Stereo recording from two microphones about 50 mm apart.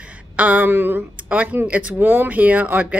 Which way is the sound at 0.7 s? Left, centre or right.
Right.